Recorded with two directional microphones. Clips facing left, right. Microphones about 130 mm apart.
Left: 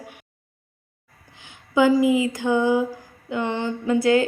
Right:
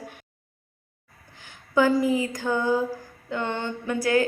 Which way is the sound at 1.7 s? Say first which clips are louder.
Left 4 dB; 15° left (ahead or behind).